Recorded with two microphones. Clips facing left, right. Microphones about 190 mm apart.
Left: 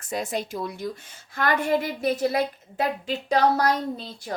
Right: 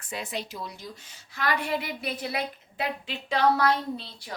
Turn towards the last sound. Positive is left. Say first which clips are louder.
# left 4 dB
turn(degrees=45)  # may be behind; listen again after turning